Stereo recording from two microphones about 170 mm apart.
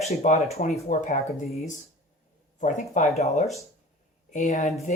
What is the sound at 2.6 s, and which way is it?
Speech, 45° left (ahead or behind).